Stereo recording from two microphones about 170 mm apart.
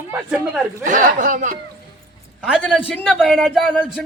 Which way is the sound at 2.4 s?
5° right (ahead or behind).